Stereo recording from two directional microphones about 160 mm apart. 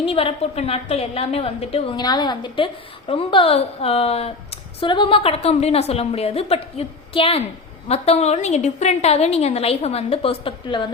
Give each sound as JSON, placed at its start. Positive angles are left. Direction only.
{"t": 0.0, "sound": "a woman's voice", "side_deg": 35}
{"t": 2.0, "sound": "a woman's voice", "side_deg": 25}